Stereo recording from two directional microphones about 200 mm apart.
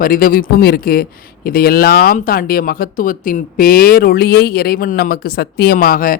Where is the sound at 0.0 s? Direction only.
45° left (ahead or behind).